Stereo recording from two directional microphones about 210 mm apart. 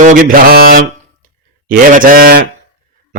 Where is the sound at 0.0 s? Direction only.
40° right (ahead or behind).